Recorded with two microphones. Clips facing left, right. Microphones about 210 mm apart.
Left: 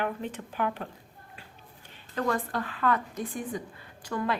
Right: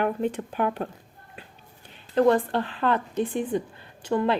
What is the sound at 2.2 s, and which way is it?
A woman's voice, 30° right (ahead or behind).